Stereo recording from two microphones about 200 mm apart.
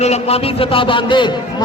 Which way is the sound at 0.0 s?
30° left (ahead or behind).